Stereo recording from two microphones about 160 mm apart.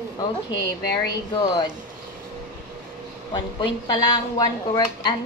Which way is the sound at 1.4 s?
25° left (ahead or behind).